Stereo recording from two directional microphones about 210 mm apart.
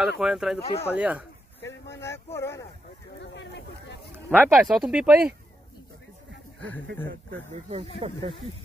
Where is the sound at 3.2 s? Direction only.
55° left (ahead or behind).